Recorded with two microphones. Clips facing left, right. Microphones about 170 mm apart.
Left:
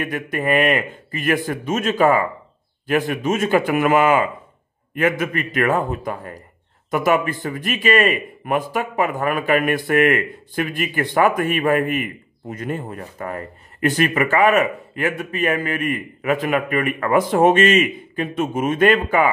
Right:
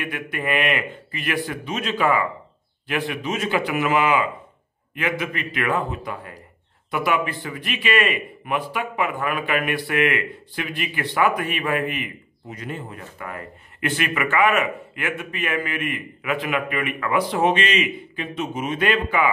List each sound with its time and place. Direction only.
0.0 s a man's voice: 40° left (ahead or behind)